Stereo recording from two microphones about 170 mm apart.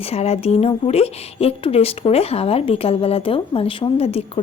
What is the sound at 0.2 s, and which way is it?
A woman's voice, 40° left (ahead or behind).